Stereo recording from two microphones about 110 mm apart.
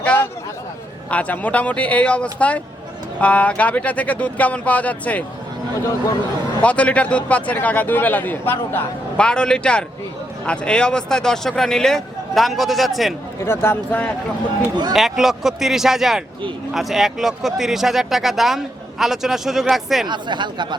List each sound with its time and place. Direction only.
0.0 s a sound: 10° left (ahead or behind)
1.1 s a man's voice: 15° left (ahead or behind)
6.6 s a man's voice: 10° left (ahead or behind)
13.4 s speech: 20° left (ahead or behind)
14.9 s speech: 5° right (ahead or behind)
20.1 s speech: 45° right (ahead or behind)